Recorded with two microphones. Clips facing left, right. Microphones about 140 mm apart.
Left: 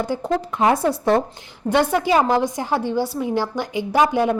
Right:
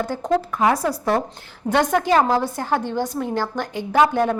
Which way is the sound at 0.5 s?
25° left (ahead or behind).